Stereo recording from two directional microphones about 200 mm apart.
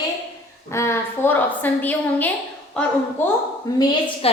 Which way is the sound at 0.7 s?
15° left (ahead or behind).